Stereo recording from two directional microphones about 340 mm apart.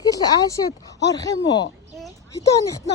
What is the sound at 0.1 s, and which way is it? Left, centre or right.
Speech, centre.